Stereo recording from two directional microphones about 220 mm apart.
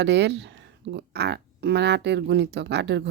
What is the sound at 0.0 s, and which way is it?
A woman's voice, 50° right (ahead or behind).